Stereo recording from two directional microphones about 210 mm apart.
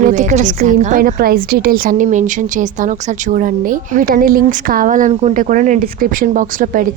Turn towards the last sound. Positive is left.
turn(degrees=-40)  # may be behind; listen again after turning